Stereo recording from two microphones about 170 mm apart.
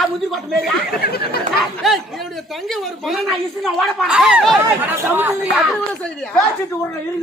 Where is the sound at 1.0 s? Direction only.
65° left (ahead or behind).